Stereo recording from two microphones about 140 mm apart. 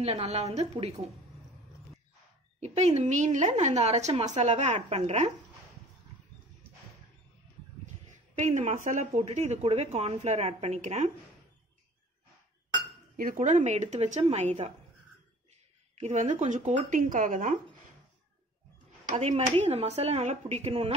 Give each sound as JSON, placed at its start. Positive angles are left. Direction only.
{"t": 0.0, "sound": "speech", "side_deg": -50}
{"t": 2.6, "sound": "a woman's voice", "side_deg": -50}
{"t": 7.8, "sound": "speech", "side_deg": -60}
{"t": 13.1, "sound": "a woman's voice", "side_deg": -80}
{"t": 19.0, "sound": "speech", "side_deg": -55}